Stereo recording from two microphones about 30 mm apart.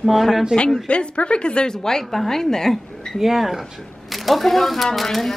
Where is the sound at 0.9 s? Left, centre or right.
Left.